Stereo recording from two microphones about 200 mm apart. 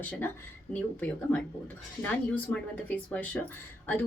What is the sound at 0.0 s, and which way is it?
Speech, 10° left (ahead or behind).